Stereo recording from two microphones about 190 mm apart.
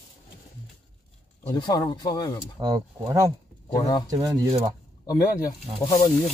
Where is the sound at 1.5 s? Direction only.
20° left (ahead or behind).